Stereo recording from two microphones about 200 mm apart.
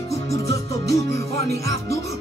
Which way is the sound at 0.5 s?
15° left (ahead or behind).